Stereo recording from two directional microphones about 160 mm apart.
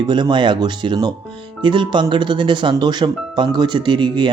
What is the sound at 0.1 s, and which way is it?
Speech, 25° right (ahead or behind).